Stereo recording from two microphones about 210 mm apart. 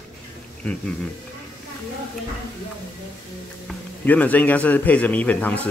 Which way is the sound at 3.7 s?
5° left (ahead or behind).